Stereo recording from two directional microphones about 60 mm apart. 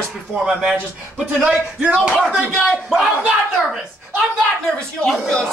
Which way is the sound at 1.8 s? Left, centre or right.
Centre.